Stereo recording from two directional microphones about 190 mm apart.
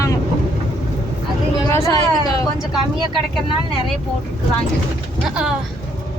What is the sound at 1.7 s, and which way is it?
Speech, 20° left (ahead or behind).